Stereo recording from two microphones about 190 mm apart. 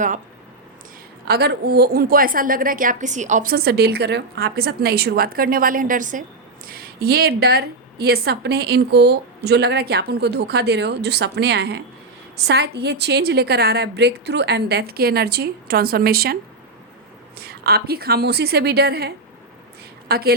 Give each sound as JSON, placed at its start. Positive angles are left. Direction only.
{"t": 1.3, "sound": "a woman's voice", "side_deg": -60}
{"t": 6.7, "sound": "a woman's voice", "side_deg": -55}